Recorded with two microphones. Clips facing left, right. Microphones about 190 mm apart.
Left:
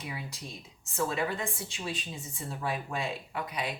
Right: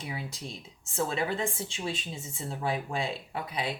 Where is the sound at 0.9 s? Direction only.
25° right (ahead or behind).